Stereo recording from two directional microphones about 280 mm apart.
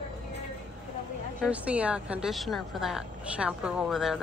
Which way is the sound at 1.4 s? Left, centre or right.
Centre.